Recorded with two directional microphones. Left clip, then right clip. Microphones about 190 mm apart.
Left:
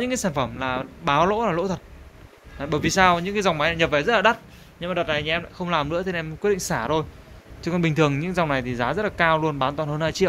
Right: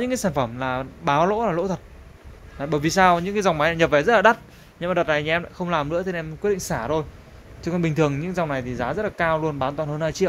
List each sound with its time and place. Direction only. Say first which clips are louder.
0.0 s speech: right 1 dB; 10° right (ahead or behind)
5.6 s speech: even; 10° right (ahead or behind)